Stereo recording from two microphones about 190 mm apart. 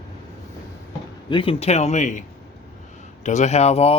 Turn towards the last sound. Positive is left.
turn(degrees=35)  # may be behind; listen again after turning